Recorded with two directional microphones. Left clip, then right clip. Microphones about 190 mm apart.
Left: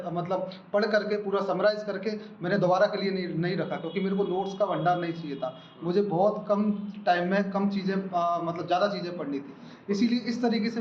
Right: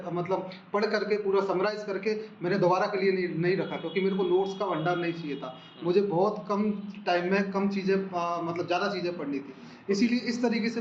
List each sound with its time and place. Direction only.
0.0 s a man's voice: 50° left (ahead or behind)